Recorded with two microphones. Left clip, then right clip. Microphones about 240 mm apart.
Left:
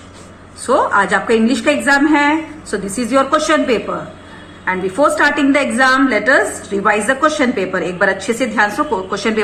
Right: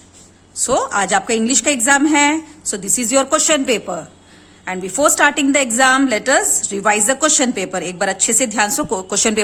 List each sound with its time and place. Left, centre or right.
0.7 s a woman's voice: right